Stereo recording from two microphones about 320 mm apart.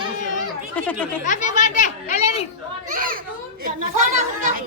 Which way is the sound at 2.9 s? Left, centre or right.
Right.